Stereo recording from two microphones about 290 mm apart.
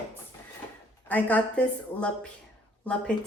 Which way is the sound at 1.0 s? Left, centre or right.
Centre.